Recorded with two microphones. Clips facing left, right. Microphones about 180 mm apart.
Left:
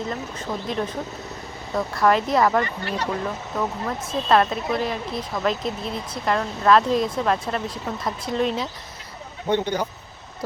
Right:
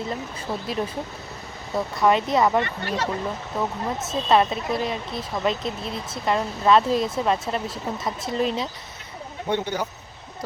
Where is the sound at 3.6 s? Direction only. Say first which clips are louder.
Even; 20° right (ahead or behind).